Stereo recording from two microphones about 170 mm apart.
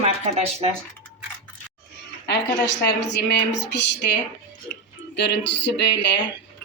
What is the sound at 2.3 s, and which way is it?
A woman's voice, 85° left.